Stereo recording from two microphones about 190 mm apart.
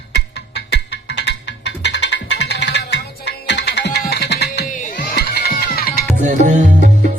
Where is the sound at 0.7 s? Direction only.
65° left (ahead or behind).